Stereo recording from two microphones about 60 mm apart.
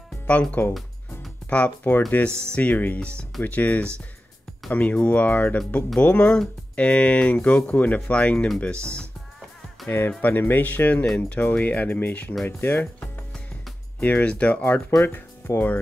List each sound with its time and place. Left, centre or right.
0.3 s speech: left
9.8 s speech: left
14.0 s speech: left
15.1 s speech: left